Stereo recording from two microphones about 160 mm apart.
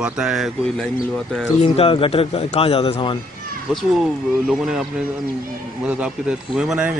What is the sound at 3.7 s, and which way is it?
A man's voice, 5° right (ahead or behind).